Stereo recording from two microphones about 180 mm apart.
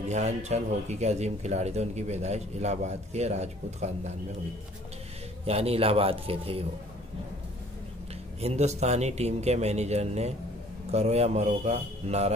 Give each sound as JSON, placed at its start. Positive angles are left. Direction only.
{"t": 0.1, "sound": "speech", "side_deg": -40}
{"t": 5.4, "sound": "speech", "side_deg": -35}
{"t": 8.4, "sound": "speech", "side_deg": -35}